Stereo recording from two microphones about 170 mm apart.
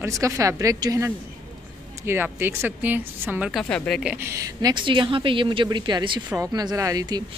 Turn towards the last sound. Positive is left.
turn(degrees=-25)  # may be behind; listen again after turning